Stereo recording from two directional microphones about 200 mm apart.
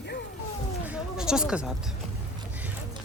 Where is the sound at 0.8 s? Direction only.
5° right (ahead or behind).